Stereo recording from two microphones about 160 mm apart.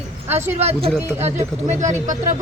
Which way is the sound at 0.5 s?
40° right (ahead or behind).